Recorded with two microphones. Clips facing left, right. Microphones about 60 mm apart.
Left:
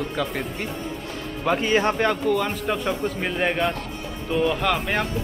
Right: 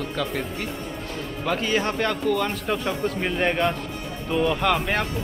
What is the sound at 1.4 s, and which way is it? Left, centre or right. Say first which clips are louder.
Speech: left 3 dB; centre.